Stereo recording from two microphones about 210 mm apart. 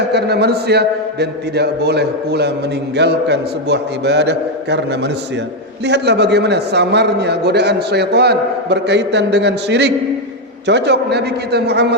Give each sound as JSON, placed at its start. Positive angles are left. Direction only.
{"t": 0.1, "sound": "a man's voice", "side_deg": -50}